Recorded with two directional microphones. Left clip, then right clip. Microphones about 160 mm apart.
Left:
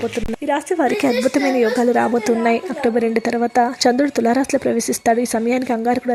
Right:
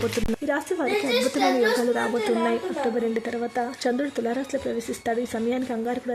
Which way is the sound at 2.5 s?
35° left (ahead or behind).